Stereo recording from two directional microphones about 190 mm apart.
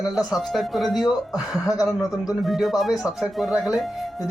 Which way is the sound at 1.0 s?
20° left (ahead or behind).